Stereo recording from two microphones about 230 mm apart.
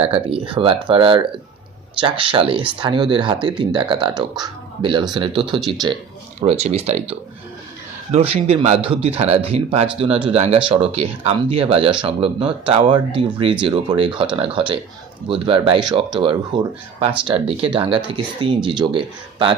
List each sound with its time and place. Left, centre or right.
0.0 s speech: right